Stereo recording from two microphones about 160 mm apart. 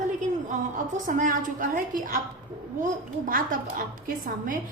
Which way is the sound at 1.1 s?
55° right (ahead or behind).